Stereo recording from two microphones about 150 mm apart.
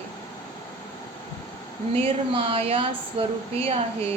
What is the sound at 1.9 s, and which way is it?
A woman's voice, 35° right (ahead or behind).